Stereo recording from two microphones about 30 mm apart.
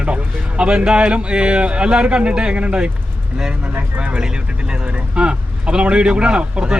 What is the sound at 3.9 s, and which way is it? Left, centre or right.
Speech, right.